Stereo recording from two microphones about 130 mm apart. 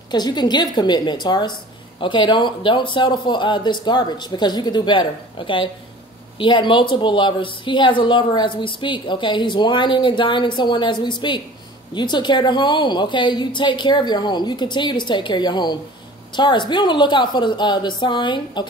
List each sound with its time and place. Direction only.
0.1 s a woman's voice: 35° left (ahead or behind)